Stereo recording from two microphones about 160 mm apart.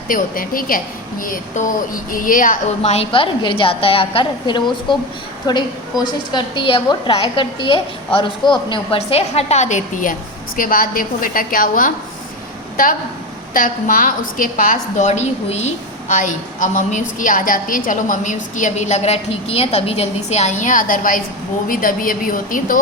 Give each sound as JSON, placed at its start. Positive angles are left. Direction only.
{"t": 0.1, "sound": "a woman's voice", "side_deg": 60}